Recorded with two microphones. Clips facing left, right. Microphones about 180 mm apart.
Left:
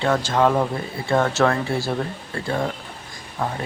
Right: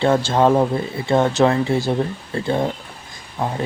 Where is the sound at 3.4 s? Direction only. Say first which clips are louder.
Right 2 dB; 20° right (ahead or behind).